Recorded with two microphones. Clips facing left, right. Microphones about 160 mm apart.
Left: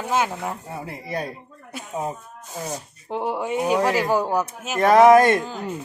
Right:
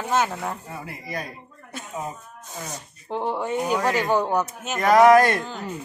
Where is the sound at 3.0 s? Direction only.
5° left (ahead or behind).